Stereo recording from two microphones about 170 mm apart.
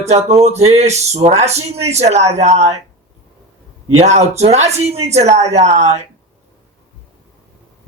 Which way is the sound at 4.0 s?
40° right (ahead or behind).